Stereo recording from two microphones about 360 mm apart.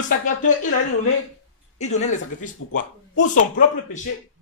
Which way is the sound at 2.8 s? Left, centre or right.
Left.